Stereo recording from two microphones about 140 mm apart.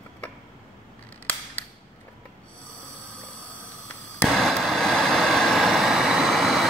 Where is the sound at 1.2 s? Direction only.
15° left (ahead or behind).